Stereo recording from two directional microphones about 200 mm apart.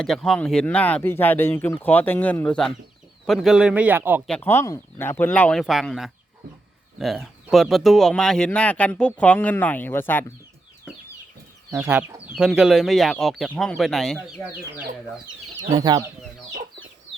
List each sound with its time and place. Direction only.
0.0 s speech: centre (ahead or behind)
4.3 s speech: 10° left (ahead or behind)
11.7 s speech: 10° right (ahead or behind)
15.7 s speech: 20° right (ahead or behind)